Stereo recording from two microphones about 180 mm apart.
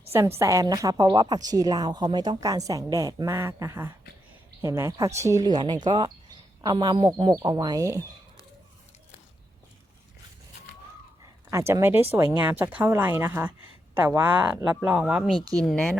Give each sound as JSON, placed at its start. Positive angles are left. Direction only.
{"t": 0.1, "sound": "a woman's voice", "side_deg": -15}
{"t": 11.5, "sound": "speech", "side_deg": -15}
{"t": 15.4, "sound": "a woman's voice", "side_deg": -20}
{"t": 15.6, "sound": "speech", "side_deg": 5}